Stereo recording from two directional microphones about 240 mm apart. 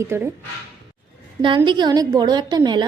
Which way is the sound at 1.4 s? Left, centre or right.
Centre.